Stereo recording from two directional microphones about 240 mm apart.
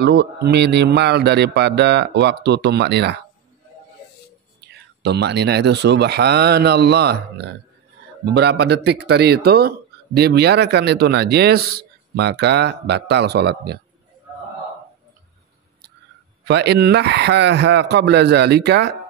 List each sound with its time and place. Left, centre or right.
0.0 s speech: right
4.6 s speech: right
16.4 s speech: right